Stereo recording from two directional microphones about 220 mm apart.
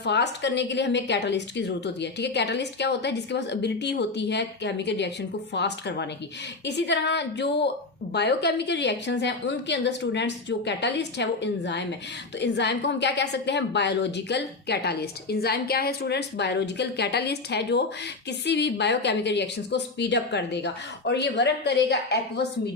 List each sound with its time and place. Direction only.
0.0 s a woman's voice: 50° left (ahead or behind)